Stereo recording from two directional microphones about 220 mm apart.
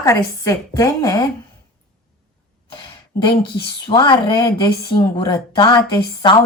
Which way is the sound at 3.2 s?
20° left (ahead or behind).